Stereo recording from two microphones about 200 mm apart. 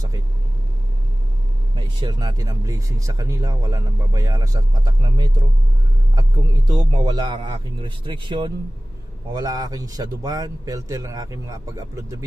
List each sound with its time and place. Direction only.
2.0 s speech: 20° right (ahead or behind)
6.7 s a man's voice: 20° right (ahead or behind)